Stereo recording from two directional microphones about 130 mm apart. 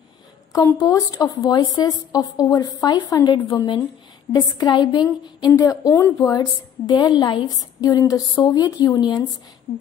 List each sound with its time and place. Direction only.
0.5 s a woman's voice: 25° left (ahead or behind)